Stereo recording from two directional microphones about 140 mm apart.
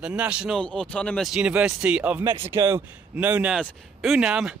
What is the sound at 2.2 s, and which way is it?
Speech, 20° right (ahead or behind).